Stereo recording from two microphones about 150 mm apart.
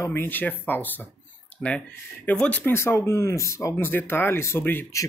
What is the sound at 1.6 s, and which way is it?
Speech, centre (ahead or behind).